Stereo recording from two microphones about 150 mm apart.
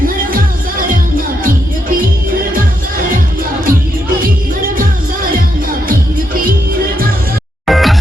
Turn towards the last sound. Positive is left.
turn(degrees=0)  # may be behind; listen again after turning